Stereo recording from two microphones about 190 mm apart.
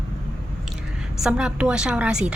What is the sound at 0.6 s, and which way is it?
A woman's voice, centre (ahead or behind).